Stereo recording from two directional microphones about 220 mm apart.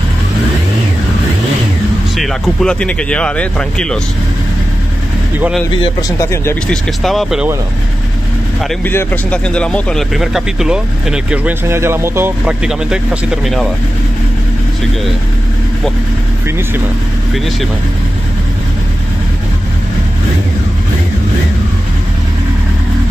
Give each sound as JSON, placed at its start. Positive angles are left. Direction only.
{"t": 2.1, "sound": "speech", "side_deg": 0}
{"t": 5.8, "sound": "speech", "side_deg": 15}
{"t": 6.7, "sound": "speech", "side_deg": 0}
{"t": 8.6, "sound": "speech", "side_deg": 10}